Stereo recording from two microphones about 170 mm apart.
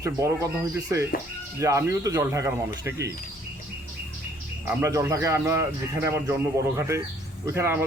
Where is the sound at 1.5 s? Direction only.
20° right (ahead or behind).